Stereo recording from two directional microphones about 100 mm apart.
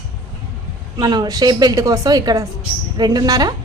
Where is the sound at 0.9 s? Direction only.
45° right (ahead or behind).